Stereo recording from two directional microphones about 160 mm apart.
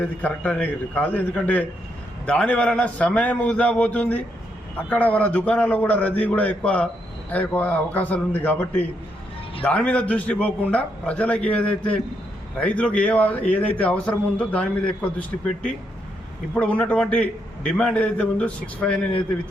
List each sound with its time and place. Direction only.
0.0 s a man's voice: 10° left (ahead or behind)
16.6 s a man's voice: 10° left (ahead or behind)